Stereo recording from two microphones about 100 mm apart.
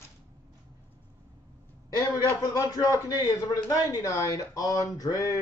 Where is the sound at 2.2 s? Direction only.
35° left (ahead or behind).